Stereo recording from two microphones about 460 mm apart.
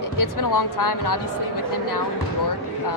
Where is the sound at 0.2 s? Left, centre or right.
Left.